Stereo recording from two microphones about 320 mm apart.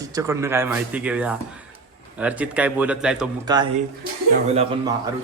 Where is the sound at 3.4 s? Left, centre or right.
Centre.